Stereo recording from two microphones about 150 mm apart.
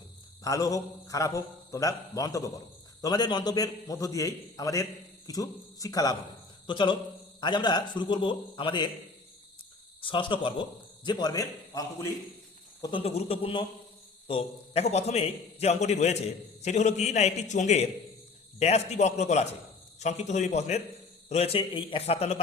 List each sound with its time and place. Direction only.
0.4 s a man's voice: 25° left (ahead or behind)
10.0 s a man's voice: 35° left (ahead or behind)
12.8 s a man's voice: 35° left (ahead or behind)